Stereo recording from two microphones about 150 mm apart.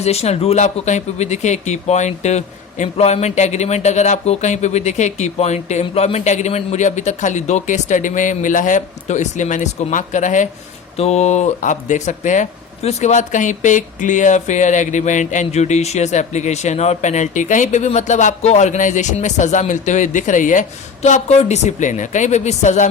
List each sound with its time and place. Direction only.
0.0 s speech: 45° left (ahead or behind)
10.9 s speech: 45° left (ahead or behind)